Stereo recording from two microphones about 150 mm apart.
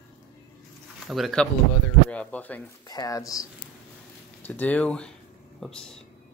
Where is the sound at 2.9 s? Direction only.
25° left (ahead or behind).